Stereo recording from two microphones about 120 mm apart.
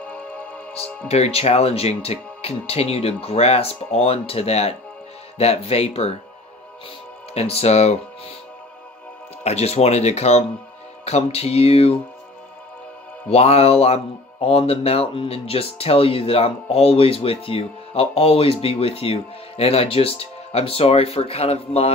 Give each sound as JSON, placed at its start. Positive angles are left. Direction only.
{"t": 0.0, "sound": "music", "side_deg": 10}
{"t": 1.0, "sound": "speech", "side_deg": 60}
{"t": 7.3, "sound": "speech", "side_deg": 60}
{"t": 9.4, "sound": "speech", "side_deg": 65}
{"t": 13.3, "sound": "speech", "side_deg": 60}